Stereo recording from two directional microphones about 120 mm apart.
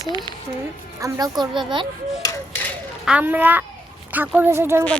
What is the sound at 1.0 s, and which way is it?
Speech, 30° right (ahead or behind).